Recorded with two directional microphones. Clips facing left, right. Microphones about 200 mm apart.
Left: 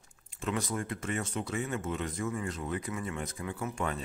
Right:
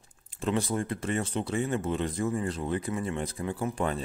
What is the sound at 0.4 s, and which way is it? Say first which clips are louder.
Speech: right 5 dB; 30° right (ahead or behind).